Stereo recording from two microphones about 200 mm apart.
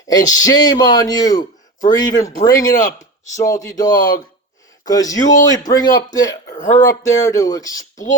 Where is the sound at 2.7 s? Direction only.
40° left (ahead or behind).